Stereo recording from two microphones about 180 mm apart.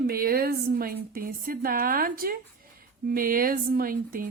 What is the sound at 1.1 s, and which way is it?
Speech, 55° right (ahead or behind).